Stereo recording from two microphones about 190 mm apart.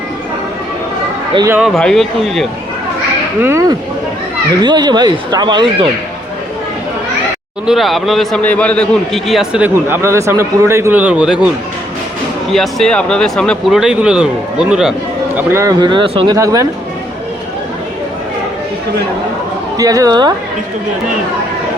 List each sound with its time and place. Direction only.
1.5 s a man's voice: 5° right (ahead or behind)
3.4 s speech: 15° right (ahead or behind)
7.7 s a man's voice: centre (ahead or behind)
12.5 s a man's voice: 5° left (ahead or behind)
15.4 s speech: 15° right (ahead or behind)
19.7 s speech: 20° right (ahead or behind)